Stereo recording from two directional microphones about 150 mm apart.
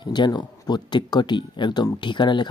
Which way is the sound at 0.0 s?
30° left (ahead or behind).